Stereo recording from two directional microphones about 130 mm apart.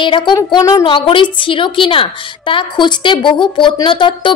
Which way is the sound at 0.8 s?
40° left (ahead or behind).